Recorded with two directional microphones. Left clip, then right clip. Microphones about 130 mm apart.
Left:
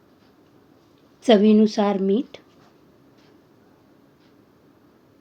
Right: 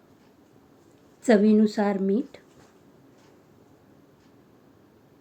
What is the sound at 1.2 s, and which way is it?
A woman's voice, 25° left (ahead or behind).